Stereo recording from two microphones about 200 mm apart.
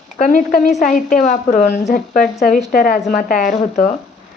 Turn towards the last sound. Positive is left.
turn(degrees=35)  # may be behind; listen again after turning